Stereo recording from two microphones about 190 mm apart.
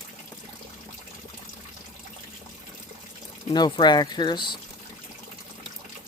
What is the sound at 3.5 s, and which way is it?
Speech, 20° left (ahead or behind).